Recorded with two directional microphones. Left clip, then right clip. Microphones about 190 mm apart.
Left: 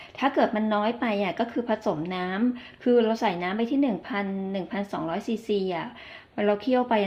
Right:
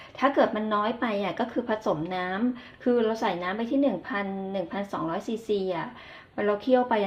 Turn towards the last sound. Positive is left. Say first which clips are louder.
# even
turn(degrees=30)  # may be behind; listen again after turning